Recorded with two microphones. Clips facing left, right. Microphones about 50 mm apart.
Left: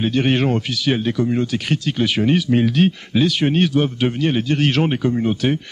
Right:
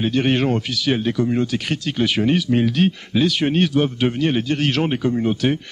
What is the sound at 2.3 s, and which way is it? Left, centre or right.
Speech, centre.